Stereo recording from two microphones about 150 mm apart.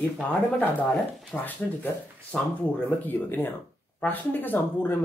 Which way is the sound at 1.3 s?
10° left (ahead or behind).